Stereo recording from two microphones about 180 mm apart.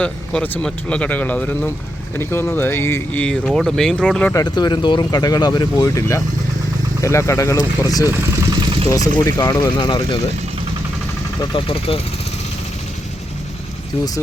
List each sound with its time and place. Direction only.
0.0 s speech: 10° left (ahead or behind)
4.4 s speech: 25° left (ahead or behind)
8.4 s vehicle: 20° right (ahead or behind)
8.9 s speech: 20° left (ahead or behind)
11.3 s speech: 30° left (ahead or behind)